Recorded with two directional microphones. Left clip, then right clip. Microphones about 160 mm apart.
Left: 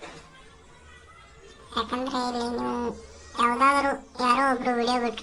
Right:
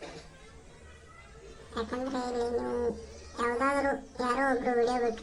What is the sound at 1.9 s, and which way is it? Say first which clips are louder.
Speech: left 4 dB; 30° left (ahead or behind).